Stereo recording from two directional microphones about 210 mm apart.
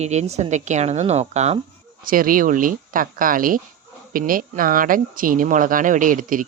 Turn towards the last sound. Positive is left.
turn(degrees=-40)  # may be behind; listen again after turning